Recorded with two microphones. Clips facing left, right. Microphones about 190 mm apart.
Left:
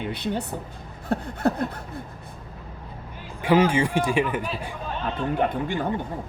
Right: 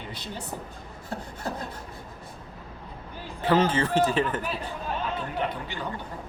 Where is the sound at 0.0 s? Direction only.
60° left (ahead or behind).